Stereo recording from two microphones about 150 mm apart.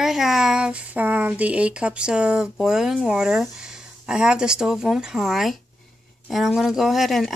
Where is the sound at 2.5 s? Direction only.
5° right (ahead or behind).